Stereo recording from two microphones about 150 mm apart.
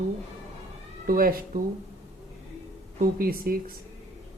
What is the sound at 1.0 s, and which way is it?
Speech, 75° right (ahead or behind).